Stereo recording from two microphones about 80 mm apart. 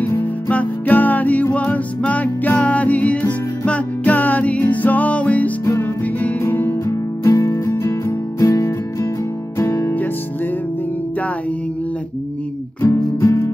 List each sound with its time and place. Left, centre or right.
0.5 s music: centre
6.5 s music: left
6.9 s music: left
12.8 s music: left